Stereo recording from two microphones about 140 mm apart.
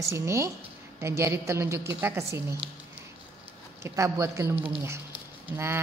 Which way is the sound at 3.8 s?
20° right (ahead or behind).